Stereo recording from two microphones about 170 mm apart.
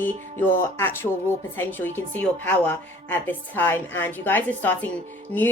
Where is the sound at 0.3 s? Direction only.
15° left (ahead or behind).